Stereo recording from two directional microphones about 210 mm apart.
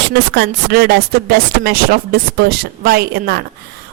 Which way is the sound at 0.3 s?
50° right (ahead or behind).